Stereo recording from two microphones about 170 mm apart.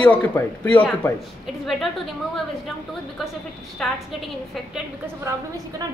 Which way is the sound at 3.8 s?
Centre (ahead or behind).